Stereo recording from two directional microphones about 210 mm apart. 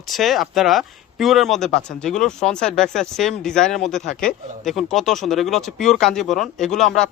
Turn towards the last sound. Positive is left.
turn(degrees=0)  # may be behind; listen again after turning